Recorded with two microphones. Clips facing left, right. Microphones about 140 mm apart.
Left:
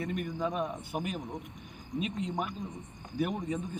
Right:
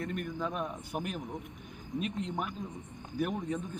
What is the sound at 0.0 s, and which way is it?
Speech, 5° left (ahead or behind).